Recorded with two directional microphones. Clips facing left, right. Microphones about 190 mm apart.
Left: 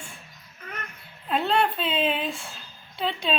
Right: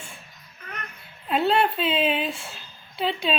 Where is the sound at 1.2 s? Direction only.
5° right (ahead or behind).